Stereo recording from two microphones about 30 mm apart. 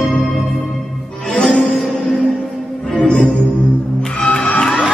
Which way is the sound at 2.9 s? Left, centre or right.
Left.